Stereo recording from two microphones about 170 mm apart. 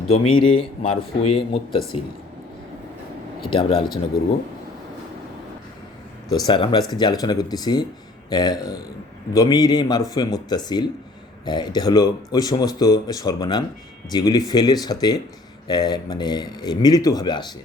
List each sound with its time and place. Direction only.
0.1 s speech: 30° left (ahead or behind)
3.5 s speech: 30° left (ahead or behind)
6.3 s speech: 25° left (ahead or behind)